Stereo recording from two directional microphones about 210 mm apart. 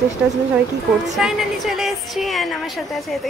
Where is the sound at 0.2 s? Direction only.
5° right (ahead or behind).